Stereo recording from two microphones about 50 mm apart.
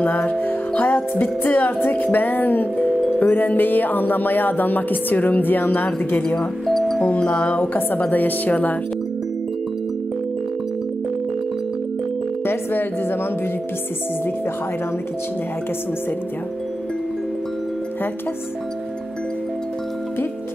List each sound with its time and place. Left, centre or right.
0.0 s music: left
6.2 s speech: centre
7.2 s music: left